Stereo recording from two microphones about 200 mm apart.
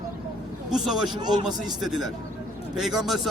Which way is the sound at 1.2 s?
20° right (ahead or behind).